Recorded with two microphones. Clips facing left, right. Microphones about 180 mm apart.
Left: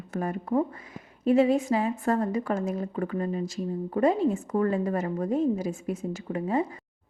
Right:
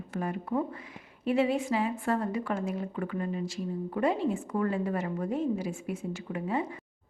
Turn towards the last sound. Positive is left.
turn(degrees=40)  # may be behind; listen again after turning